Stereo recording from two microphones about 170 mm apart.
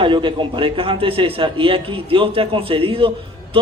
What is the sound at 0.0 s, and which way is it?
A man's voice, 30° right (ahead or behind).